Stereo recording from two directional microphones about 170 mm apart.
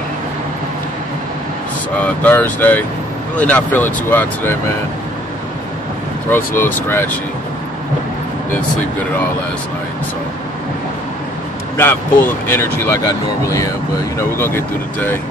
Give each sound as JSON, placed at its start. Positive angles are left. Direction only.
{"t": 2.0, "sound": "speech", "side_deg": 10}
{"t": 6.3, "sound": "speech", "side_deg": 15}
{"t": 11.7, "sound": "speech", "side_deg": 15}